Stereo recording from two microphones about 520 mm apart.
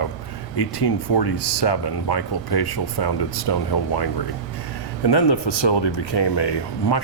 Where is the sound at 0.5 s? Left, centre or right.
Left.